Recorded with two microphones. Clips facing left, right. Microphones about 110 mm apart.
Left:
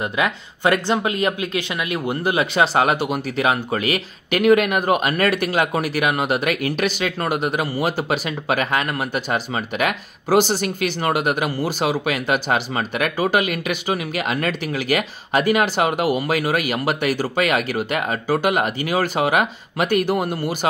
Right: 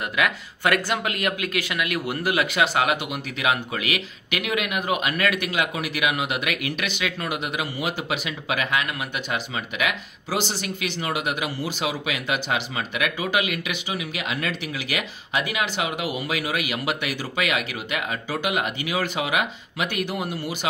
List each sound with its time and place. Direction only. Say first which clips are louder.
0.0 s speech: left 3 dB; 30° left (ahead or behind); by 20.5 s 50° left (ahead or behind)